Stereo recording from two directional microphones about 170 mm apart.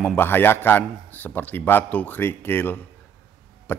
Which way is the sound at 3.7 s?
10° left (ahead or behind).